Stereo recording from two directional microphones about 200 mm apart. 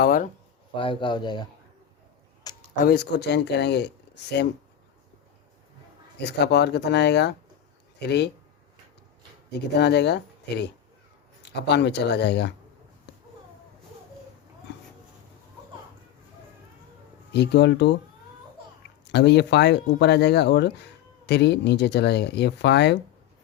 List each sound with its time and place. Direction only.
0.0 s speech: 45° left (ahead or behind)
0.7 s speech: 25° left (ahead or behind)
2.5 s a sound: 20° left (ahead or behind)
2.8 s speech: 50° left (ahead or behind)
6.1 s speech: 55° left (ahead or behind)
9.7 s speech: 55° left (ahead or behind)
11.5 s speech: 55° left (ahead or behind)
17.3 s speech: 55° left (ahead or behind)
19.1 s speech: 55° left (ahead or behind)